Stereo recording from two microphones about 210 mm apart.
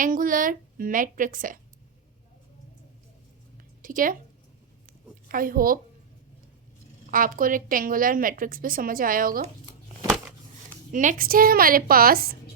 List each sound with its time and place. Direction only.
0.0 s a woman's voice: 40° right (ahead or behind)
3.8 s a woman's voice: 40° right (ahead or behind)
5.3 s a woman's voice: 40° right (ahead or behind)
7.1 s a woman's voice: 40° right (ahead or behind)
10.9 s a woman's voice: 40° right (ahead or behind)